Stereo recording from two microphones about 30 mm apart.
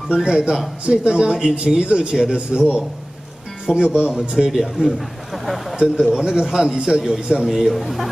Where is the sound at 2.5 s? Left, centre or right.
Right.